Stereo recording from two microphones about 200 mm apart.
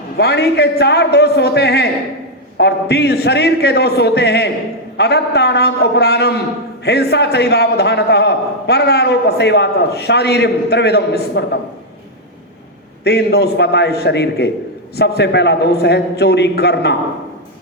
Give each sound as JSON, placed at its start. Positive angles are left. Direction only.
{"t": 0.2, "sound": "a man's voice", "side_deg": 55}
{"t": 13.1, "sound": "a man's voice", "side_deg": 55}